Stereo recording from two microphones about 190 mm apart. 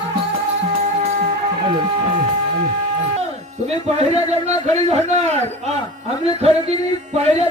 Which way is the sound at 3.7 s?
35° right (ahead or behind).